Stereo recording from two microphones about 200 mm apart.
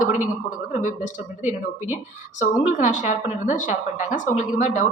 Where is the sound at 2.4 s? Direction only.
40° left (ahead or behind).